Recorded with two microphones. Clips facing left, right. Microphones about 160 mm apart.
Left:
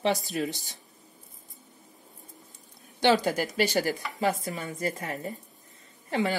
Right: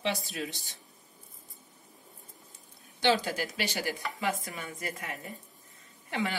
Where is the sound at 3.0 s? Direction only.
45° left (ahead or behind).